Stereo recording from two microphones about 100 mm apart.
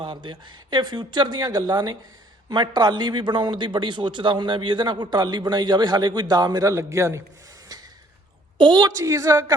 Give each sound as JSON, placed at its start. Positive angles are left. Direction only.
{"t": 0.0, "sound": "a man's voice", "side_deg": -50}
{"t": 7.7, "sound": "a sound", "side_deg": -40}
{"t": 8.5, "sound": "a woman's voice", "side_deg": -50}
{"t": 9.0, "sound": "a woman's voice", "side_deg": -30}